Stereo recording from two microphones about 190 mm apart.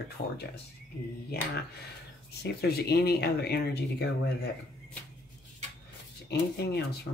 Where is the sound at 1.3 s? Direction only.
55° left (ahead or behind).